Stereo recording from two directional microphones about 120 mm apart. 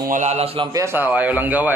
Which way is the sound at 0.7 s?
20° right (ahead or behind).